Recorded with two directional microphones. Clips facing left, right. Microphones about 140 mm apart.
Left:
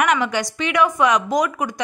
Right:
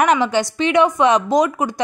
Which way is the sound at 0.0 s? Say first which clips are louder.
Right 4 dB; 30° right (ahead or behind).